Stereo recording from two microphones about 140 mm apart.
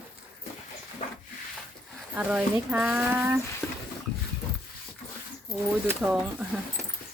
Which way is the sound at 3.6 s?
10° left (ahead or behind).